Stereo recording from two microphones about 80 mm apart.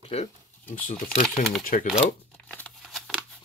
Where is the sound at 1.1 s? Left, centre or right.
Centre.